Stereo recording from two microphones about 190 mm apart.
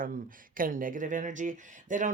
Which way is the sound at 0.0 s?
45° right (ahead or behind).